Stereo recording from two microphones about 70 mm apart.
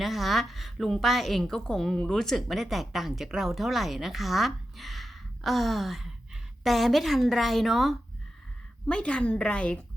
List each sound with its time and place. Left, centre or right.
0.0 s a woman's voice: centre
8.9 s a woman's voice: centre